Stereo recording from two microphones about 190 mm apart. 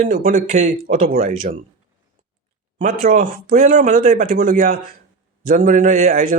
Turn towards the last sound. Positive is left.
turn(degrees=-50)  # may be behind; listen again after turning